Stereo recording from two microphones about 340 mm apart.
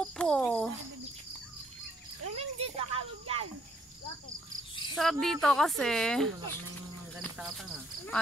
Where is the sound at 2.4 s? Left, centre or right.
Centre.